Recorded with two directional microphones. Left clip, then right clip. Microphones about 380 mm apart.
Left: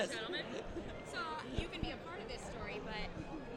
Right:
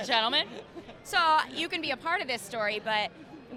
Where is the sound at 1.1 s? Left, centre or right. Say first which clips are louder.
Right 19 dB; right.